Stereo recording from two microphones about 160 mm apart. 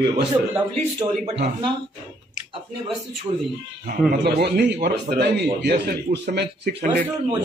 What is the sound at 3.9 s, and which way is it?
Speech, 75° right (ahead or behind).